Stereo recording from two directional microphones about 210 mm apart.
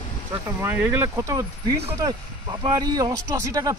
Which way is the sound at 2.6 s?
15° right (ahead or behind).